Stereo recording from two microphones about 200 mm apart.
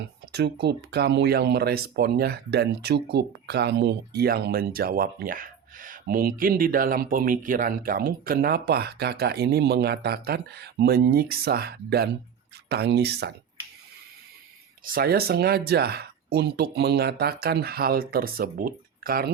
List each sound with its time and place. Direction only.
0.3 s speech: 55° right (ahead or behind)
14.8 s speech: 50° right (ahead or behind)